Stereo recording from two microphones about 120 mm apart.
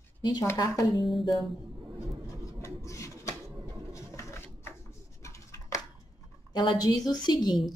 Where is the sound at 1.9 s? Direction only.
25° left (ahead or behind).